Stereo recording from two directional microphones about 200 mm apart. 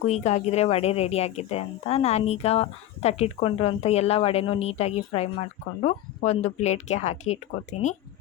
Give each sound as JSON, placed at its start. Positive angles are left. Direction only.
{"t": 0.0, "sound": "speech", "side_deg": 35}